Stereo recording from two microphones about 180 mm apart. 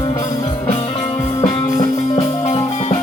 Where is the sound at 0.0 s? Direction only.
20° left (ahead or behind).